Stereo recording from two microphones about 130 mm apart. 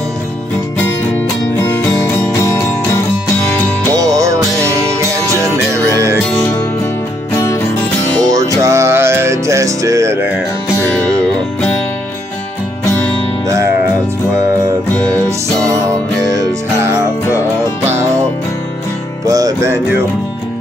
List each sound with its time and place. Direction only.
1.6 s music: 15° left (ahead or behind)
3.9 s music: 25° right (ahead or behind)
7.3 s music: 20° left (ahead or behind)
8.3 s music: 25° right (ahead or behind)
13.5 s music: 25° right (ahead or behind)
16.2 s music: 25° right (ahead or behind)
19.2 s music: 25° right (ahead or behind)